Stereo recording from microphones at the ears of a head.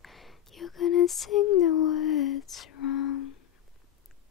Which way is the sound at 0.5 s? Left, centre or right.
Left.